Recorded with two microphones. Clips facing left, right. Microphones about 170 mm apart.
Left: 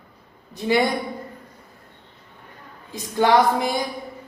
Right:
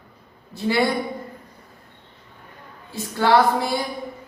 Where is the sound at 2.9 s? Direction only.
15° left (ahead or behind).